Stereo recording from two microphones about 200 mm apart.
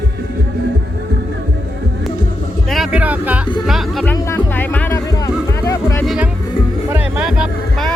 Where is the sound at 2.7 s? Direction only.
5° right (ahead or behind).